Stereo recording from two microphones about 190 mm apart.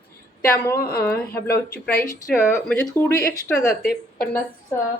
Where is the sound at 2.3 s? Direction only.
5° left (ahead or behind).